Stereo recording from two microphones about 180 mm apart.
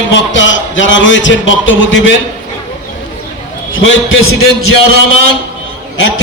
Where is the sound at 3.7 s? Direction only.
90° left.